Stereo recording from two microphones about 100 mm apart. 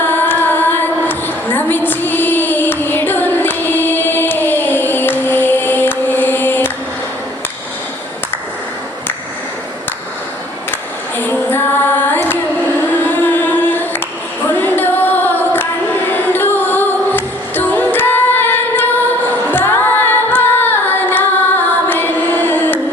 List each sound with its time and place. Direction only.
0.0 s female singing: 20° left (ahead or behind)
11.2 s female singing: 20° left (ahead or behind)
12.9 s singing: 20° left (ahead or behind)
14.6 s music: 20° left (ahead or behind)